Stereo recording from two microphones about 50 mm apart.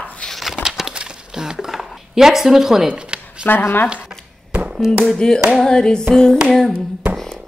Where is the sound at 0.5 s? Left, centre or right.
Centre.